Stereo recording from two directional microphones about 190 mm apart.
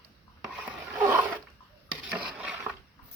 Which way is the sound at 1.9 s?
5° right (ahead or behind).